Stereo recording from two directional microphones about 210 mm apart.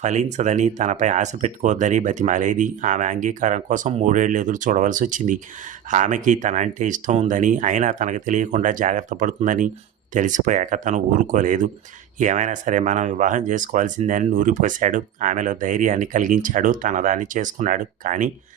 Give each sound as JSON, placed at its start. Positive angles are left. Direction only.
{"t": 0.0, "sound": "speech", "side_deg": -35}